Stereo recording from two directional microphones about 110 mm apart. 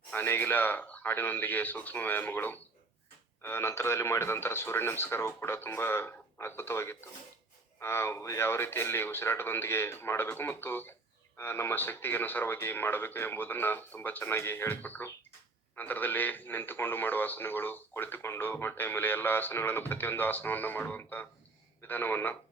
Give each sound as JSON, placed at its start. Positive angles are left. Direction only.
{"t": 0.1, "sound": "a man's voice", "side_deg": 20}